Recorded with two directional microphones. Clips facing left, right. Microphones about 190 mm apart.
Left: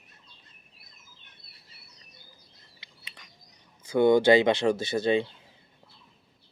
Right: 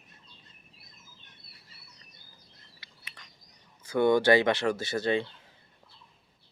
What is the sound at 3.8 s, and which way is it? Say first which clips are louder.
Speech: left 3 dB; 15° left (ahead or behind).